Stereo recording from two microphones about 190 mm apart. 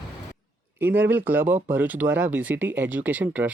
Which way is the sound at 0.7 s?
10° right (ahead or behind).